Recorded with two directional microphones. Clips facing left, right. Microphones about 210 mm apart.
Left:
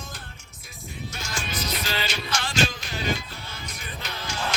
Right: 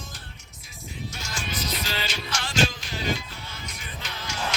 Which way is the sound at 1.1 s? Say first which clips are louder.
Left 2 dB; 55° left (ahead or behind).